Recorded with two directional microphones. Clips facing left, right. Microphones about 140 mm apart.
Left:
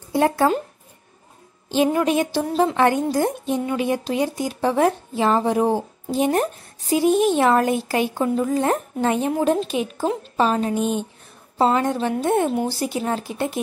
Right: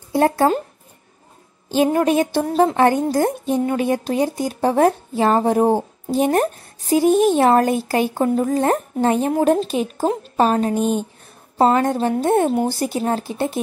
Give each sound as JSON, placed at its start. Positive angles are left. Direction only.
{"t": 0.1, "sound": "a woman's voice", "side_deg": -40}
{"t": 1.7, "sound": "a woman's voice", "side_deg": -45}